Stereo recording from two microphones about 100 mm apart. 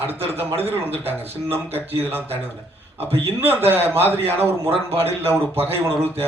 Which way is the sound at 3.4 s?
20° right (ahead or behind).